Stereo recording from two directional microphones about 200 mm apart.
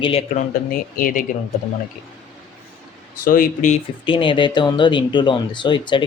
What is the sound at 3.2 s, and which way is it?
Speech, 45° left (ahead or behind).